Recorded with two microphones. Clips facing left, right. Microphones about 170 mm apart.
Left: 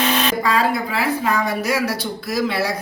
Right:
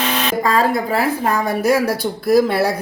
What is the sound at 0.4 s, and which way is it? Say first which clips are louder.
A woman's voice: right 3 dB; 45° right (ahead or behind).